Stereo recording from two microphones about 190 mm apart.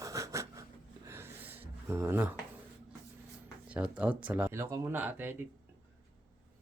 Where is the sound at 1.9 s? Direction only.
15° right (ahead or behind).